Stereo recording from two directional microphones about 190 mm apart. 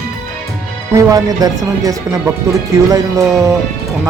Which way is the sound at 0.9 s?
20° right (ahead or behind).